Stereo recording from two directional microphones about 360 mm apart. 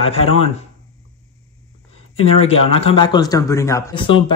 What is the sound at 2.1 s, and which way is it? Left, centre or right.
A man's voice, centre.